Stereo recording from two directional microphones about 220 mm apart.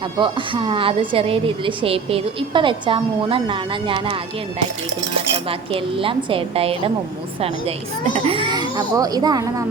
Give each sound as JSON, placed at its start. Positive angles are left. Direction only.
{"t": 0.2, "sound": "a woman's voice", "side_deg": -20}
{"t": 5.5, "sound": "a woman's voice", "side_deg": -25}
{"t": 8.1, "sound": "a woman's voice", "side_deg": -25}